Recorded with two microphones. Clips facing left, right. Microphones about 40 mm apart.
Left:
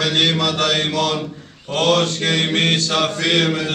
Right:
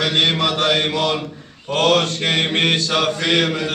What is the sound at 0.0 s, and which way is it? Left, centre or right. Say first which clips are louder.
Mantra: even; centre.